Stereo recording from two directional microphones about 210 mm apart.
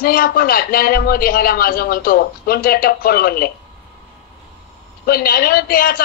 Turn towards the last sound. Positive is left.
turn(degrees=45)  # may be behind; listen again after turning